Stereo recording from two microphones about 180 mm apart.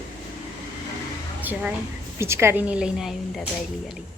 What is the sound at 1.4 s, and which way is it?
A woman's voice, 10° right (ahead or behind).